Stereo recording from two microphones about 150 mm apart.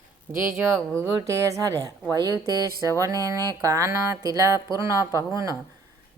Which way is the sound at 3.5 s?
20° right (ahead or behind).